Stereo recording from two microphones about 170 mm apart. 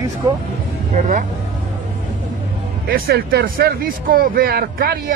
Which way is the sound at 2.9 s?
60° right (ahead or behind).